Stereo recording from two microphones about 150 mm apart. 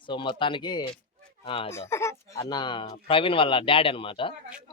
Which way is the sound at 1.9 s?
20° left (ahead or behind).